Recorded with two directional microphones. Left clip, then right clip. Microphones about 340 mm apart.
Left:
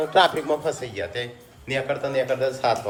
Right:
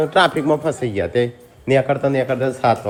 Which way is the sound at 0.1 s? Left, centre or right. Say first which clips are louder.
Right 4 dB; centre.